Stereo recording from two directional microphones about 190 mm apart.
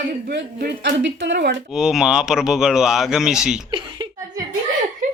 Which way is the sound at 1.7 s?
Centre (ahead or behind).